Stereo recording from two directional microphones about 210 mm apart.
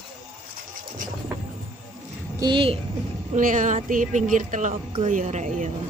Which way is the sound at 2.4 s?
25° right (ahead or behind).